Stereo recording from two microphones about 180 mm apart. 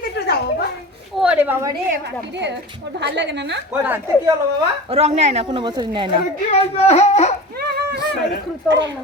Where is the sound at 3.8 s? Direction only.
10° right (ahead or behind).